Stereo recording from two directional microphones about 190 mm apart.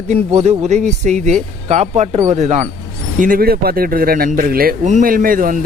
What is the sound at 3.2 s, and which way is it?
Speech, 50° right (ahead or behind).